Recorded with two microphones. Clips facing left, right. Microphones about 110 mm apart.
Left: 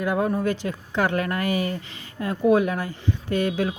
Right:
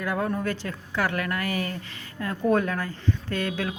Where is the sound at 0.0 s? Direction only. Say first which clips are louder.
Left 4 dB; 20° left (ahead or behind).